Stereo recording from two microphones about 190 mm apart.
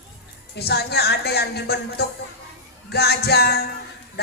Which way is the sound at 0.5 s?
60° left (ahead or behind).